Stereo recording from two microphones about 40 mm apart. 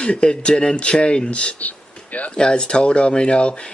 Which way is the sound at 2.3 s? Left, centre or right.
Left.